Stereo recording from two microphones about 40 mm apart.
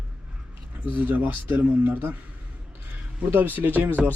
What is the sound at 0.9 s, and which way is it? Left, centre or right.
Speech, right.